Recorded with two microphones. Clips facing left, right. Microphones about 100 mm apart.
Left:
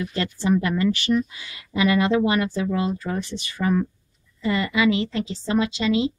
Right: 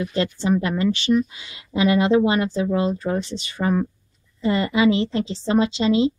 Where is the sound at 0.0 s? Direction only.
25° right (ahead or behind).